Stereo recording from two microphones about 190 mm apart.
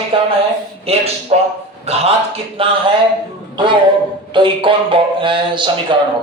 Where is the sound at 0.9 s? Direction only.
30° right (ahead or behind).